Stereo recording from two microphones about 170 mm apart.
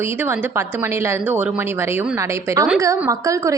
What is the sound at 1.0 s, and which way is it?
A woman's voice, 10° right (ahead or behind).